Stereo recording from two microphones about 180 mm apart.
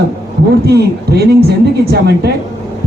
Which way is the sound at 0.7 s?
65° right (ahead or behind).